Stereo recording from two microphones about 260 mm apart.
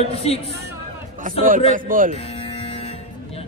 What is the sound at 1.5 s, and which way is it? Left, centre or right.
Speech, right.